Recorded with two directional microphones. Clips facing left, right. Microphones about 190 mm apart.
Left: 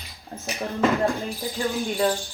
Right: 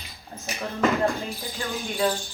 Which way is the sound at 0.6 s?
35° left (ahead or behind).